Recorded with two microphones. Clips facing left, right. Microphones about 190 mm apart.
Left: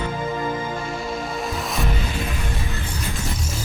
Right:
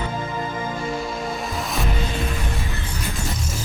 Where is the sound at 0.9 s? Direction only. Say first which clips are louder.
Right 1 dB; centre (ahead or behind).